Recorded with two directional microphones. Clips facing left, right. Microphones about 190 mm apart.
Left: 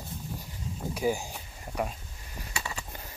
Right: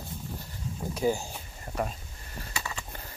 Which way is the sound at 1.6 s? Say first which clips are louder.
Even; 10° left (ahead or behind).